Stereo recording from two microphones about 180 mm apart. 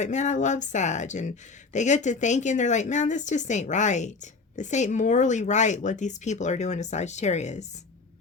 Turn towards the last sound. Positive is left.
turn(degrees=40)  # may be behind; listen again after turning